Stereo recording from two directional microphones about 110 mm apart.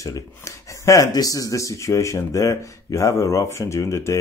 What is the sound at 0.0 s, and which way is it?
Speech, 30° left (ahead or behind).